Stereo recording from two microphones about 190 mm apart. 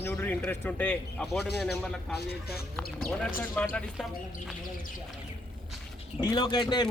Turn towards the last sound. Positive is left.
turn(degrees=20)  # may be behind; listen again after turning